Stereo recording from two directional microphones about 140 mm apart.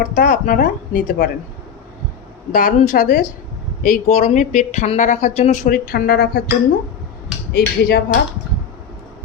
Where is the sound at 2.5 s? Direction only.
70° left (ahead or behind).